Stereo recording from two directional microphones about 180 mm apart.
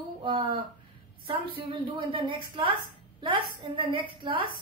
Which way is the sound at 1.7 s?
30° right (ahead or behind).